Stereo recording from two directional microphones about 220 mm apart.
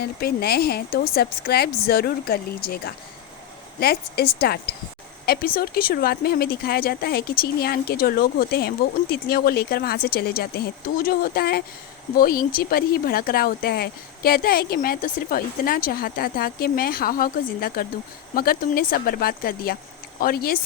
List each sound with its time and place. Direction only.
0.0 s speech: 45° left (ahead or behind)